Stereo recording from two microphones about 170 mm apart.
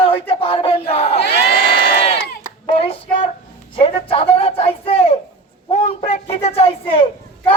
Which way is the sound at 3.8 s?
35° left (ahead or behind).